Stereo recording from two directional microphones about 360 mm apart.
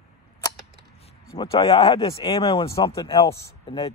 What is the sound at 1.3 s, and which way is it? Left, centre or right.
Speech, centre.